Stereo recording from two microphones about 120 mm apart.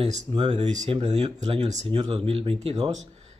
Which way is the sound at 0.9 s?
60° right (ahead or behind).